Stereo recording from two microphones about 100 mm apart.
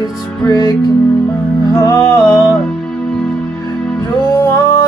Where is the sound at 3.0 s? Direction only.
10° left (ahead or behind).